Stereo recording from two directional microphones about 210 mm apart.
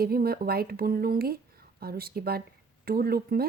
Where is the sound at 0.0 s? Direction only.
45° right (ahead or behind).